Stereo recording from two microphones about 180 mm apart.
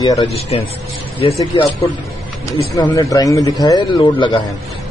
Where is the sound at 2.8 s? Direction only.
20° left (ahead or behind).